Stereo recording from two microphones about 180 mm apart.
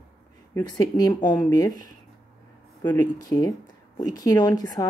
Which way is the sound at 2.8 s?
10° left (ahead or behind).